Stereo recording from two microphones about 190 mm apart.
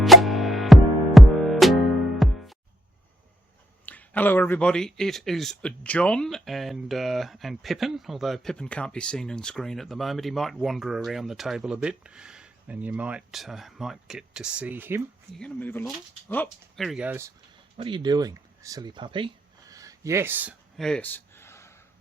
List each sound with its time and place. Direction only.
0.0 s music: centre (ahead or behind)
3.8 s speech: 10° left (ahead or behind); by 15.0 s 10° right (ahead or behind)
15.3 s speech: 5° left (ahead or behind); by 17.3 s 10° right (ahead or behind)
17.7 s speech: 25° right (ahead or behind); by 21.8 s 15° left (ahead or behind)